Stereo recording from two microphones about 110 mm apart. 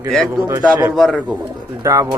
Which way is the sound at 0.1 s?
5° left (ahead or behind).